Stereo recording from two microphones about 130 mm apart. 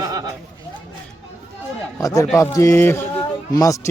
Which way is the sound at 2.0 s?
25° left (ahead or behind).